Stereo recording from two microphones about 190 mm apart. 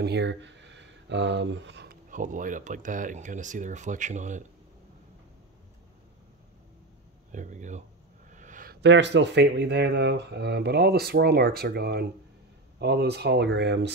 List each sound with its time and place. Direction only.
0.0 s speech: 65° right (ahead or behind)
2.0 s speech: 45° right (ahead or behind)
7.3 s speech: 40° right (ahead or behind)
8.3 s a sound: 40° right (ahead or behind)
8.8 s speech: 70° right (ahead or behind)